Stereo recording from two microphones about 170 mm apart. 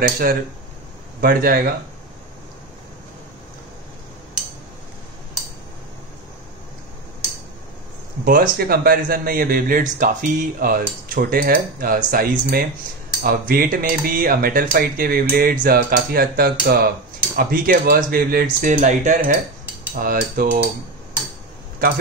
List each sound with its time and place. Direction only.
0.0 s speech: 60° right (ahead or behind)
8.3 s speech: 60° right (ahead or behind)
19.9 s speech: 60° right (ahead or behind)